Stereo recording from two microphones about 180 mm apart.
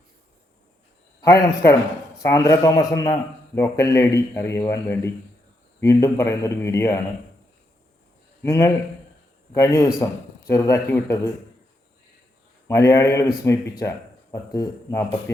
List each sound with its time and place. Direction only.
1.2 s a man's voice: 15° left (ahead or behind)
8.4 s a man's voice: 15° left (ahead or behind)
12.6 s a man's voice: 15° left (ahead or behind)